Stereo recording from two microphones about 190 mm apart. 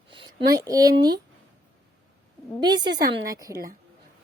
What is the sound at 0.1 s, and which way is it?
Speech, 25° right (ahead or behind).